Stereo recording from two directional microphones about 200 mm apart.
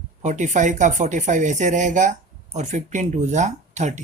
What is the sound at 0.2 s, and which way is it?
Speech, 35° right (ahead or behind).